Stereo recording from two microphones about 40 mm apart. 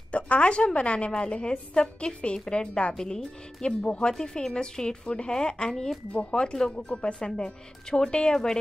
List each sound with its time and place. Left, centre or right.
0.1 s a woman's voice: left
2.9 s speech: centre
3.6 s a woman's voice: left
6.9 s a woman's voice: left